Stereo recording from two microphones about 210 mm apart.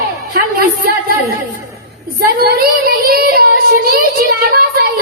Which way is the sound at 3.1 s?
45° right (ahead or behind).